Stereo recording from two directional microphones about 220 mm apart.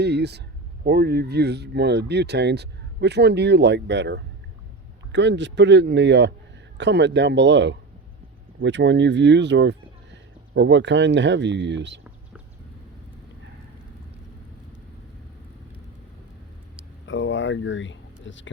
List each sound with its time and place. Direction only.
0.0 s speech: 50° right (ahead or behind)
17.1 s speech: 55° left (ahead or behind)